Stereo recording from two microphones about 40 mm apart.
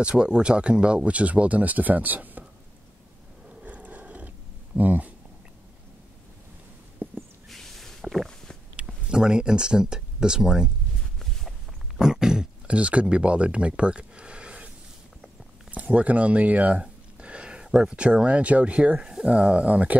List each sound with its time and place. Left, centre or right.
0.0 s speech: right
3.6 s a sound: right
4.7 s speech: right
7.0 s a sound: right
7.4 s a sound: centre
9.1 s speech: centre
12.0 s throat clearing: centre
12.6 s speech: right
15.7 s speech: right
17.2 s a sound: right
17.6 s speech: centre
17.9 s speech: right